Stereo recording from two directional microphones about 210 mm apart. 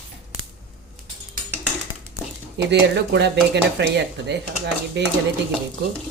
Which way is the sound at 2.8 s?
55° right (ahead or behind).